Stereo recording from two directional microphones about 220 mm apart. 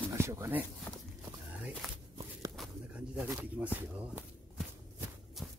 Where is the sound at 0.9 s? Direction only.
10° left (ahead or behind).